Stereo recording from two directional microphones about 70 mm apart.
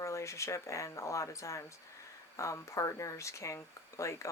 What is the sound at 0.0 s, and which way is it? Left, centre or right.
Speech, left.